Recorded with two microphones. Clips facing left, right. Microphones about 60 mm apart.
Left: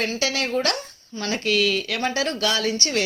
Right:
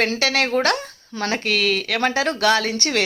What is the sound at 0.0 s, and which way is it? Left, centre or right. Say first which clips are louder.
Speech: right 4 dB; right.